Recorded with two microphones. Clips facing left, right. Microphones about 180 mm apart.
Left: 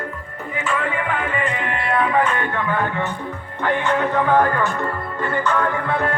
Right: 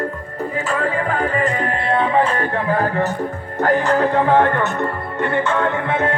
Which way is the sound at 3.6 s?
40° right (ahead or behind).